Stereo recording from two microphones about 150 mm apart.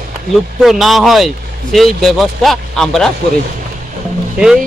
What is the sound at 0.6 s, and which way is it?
Speech, centre (ahead or behind).